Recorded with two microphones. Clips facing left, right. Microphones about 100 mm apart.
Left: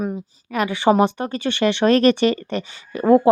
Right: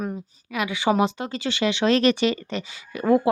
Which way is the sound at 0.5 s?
50° left (ahead or behind).